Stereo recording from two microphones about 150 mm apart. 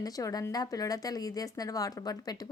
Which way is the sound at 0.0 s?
25° left (ahead or behind).